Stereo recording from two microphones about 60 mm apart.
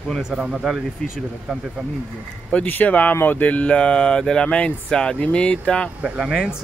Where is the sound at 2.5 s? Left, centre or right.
Left.